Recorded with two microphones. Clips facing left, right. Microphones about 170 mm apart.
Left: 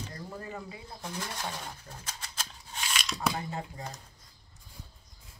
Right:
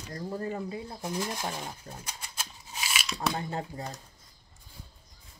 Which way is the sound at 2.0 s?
10° right (ahead or behind).